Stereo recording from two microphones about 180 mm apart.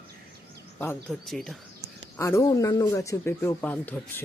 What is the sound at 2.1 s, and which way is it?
A man's voice, 15° left (ahead or behind).